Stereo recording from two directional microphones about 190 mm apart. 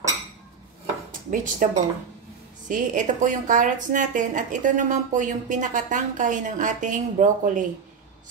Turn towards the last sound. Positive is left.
turn(degrees=-40)  # may be behind; listen again after turning